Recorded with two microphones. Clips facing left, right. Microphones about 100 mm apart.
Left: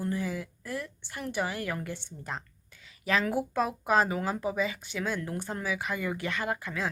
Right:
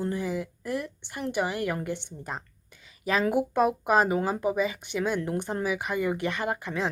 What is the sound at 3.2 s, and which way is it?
Speech, 15° right (ahead or behind).